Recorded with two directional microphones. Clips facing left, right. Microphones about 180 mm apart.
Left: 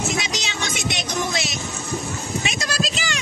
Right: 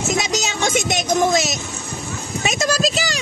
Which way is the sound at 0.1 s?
45° right (ahead or behind).